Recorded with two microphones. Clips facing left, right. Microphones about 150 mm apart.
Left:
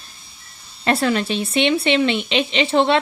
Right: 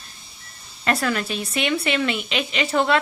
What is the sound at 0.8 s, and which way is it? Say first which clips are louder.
Speech: left 4 dB; 30° left (ahead or behind).